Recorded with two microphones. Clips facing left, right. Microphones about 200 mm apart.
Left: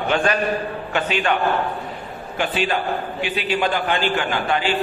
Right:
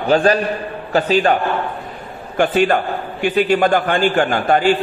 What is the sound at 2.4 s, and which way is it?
A man's voice, 50° right (ahead or behind).